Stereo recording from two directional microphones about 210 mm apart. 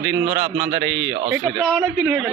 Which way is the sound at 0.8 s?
10° right (ahead or behind).